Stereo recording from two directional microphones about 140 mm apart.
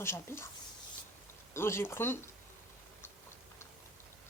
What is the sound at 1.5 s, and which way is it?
Speech, 20° left (ahead or behind).